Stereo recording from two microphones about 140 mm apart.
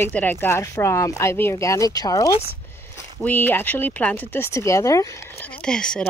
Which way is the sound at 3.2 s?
15° left (ahead or behind).